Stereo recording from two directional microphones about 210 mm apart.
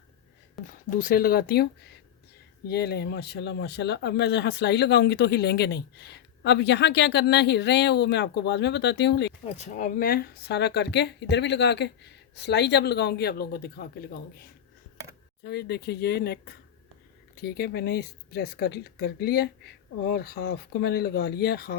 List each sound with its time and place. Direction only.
0.7 s speech: 40° left (ahead or behind)
2.6 s speech: 50° left (ahead or behind)
9.5 s speech: 40° left (ahead or behind)
15.4 s speech: 50° left (ahead or behind)